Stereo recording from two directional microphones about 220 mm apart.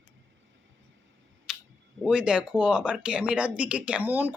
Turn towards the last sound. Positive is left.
turn(degrees=-10)  # may be behind; listen again after turning